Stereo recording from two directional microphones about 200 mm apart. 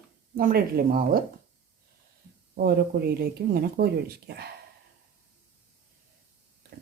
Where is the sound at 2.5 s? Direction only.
50° right (ahead or behind).